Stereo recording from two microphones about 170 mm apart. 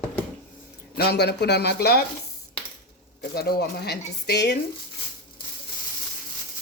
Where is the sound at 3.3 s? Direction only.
70° left (ahead or behind).